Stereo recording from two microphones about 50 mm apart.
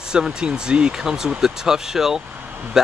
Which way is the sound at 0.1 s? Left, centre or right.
Centre.